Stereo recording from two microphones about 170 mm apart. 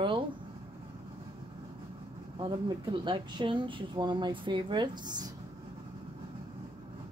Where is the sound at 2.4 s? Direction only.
30° right (ahead or behind).